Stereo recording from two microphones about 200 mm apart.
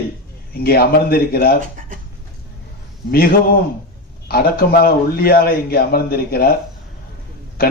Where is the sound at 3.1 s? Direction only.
50° left (ahead or behind).